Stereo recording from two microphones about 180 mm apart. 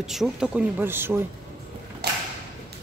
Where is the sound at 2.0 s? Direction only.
65° right (ahead or behind).